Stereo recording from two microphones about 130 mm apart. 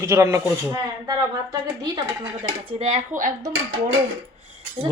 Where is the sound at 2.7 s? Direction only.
50° right (ahead or behind).